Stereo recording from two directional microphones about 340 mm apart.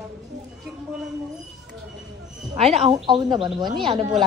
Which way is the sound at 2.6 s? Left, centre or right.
Centre.